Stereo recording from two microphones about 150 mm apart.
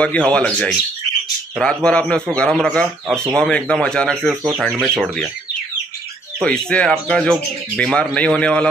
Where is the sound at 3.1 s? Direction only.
20° right (ahead or behind).